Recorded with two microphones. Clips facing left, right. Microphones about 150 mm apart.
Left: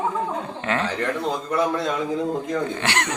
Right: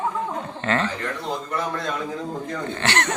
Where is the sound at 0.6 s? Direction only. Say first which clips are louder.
Right 2 dB; 10° left (ahead or behind).